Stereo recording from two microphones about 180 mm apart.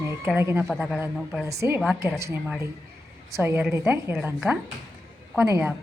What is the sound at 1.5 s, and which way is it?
A woman's voice, 15° right (ahead or behind).